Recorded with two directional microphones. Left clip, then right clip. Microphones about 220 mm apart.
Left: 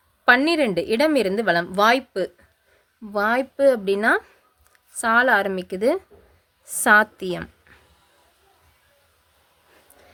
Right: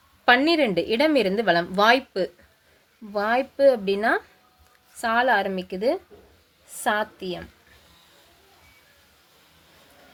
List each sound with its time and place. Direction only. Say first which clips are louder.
0.3 s a woman's voice: left 1 dB; 15° left (ahead or behind); by 7.4 s 35° left (ahead or behind)